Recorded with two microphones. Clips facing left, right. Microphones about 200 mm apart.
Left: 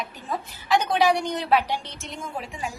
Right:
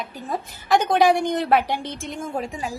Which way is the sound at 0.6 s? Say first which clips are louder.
Right 3 dB; 50° right (ahead or behind).